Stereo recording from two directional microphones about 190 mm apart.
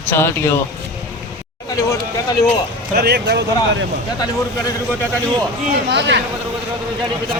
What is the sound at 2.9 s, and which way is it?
Speech, 55° right (ahead or behind).